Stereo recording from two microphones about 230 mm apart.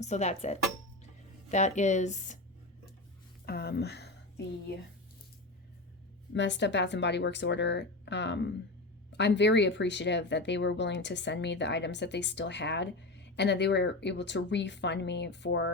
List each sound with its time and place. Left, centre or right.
0.0 s speech: left
3.4 s speech: left
6.3 s speech: left